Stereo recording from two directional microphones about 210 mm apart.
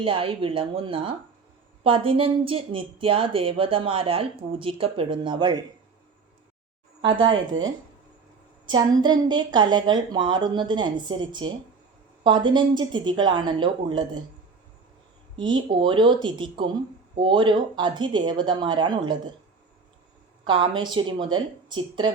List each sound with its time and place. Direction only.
0.0 s speech: 25° right (ahead or behind)
7.0 s speech: 25° right (ahead or behind)
8.6 s speech: 20° right (ahead or behind)
15.4 s speech: 20° right (ahead or behind)
20.4 s speech: 25° right (ahead or behind)